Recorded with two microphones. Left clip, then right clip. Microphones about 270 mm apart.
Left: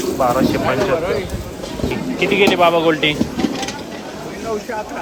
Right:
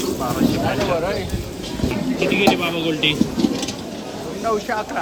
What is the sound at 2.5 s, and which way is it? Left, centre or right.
Speech, centre.